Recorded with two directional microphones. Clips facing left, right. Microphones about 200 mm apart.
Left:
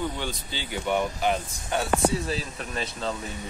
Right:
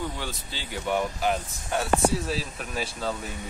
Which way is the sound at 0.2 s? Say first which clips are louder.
Left 3 dB; 5° right (ahead or behind).